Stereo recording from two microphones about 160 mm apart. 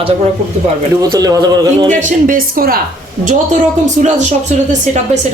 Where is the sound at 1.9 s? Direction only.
55° right (ahead or behind).